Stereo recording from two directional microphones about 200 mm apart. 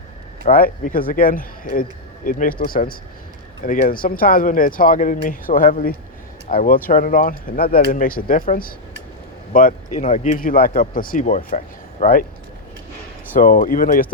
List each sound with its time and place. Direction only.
0.4 s speech: 45° left (ahead or behind)
13.3 s speech: 45° left (ahead or behind)